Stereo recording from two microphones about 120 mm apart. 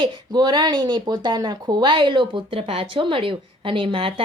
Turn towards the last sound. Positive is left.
turn(degrees=-45)  # may be behind; listen again after turning